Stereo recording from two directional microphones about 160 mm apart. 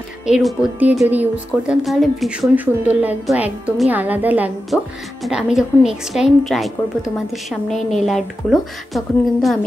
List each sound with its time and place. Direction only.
0.3 s a woman's voice: centre (ahead or behind)